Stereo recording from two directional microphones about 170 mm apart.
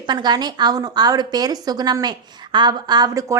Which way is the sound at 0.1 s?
25° right (ahead or behind).